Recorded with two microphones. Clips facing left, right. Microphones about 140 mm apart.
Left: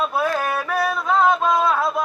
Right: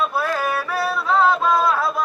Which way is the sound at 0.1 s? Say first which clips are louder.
Left 1 dB; 20° left (ahead or behind).